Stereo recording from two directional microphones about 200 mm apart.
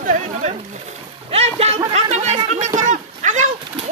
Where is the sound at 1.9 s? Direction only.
35° right (ahead or behind).